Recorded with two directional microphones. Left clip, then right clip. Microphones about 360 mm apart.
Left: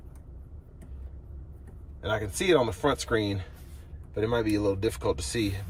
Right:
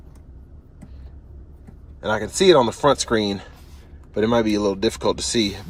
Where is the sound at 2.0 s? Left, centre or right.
Centre.